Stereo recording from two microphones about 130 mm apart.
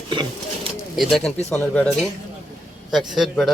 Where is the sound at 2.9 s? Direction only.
Centre (ahead or behind).